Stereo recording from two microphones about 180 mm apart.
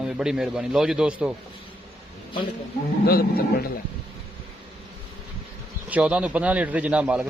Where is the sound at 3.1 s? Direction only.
55° left (ahead or behind).